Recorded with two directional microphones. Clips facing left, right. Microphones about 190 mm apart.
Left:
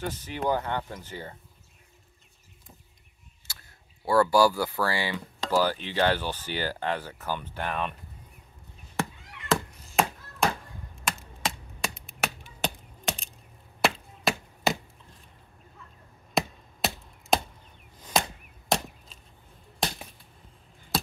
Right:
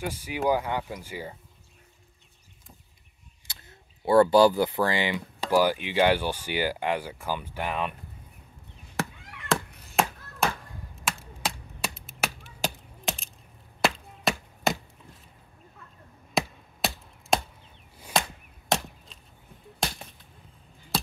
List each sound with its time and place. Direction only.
0.0 s speech: 10° right (ahead or behind)
3.5 s a sound: 20° right (ahead or behind)
4.0 s speech: 25° right (ahead or behind)
9.5 s chop: centre (ahead or behind)
16.3 s chop: centre (ahead or behind)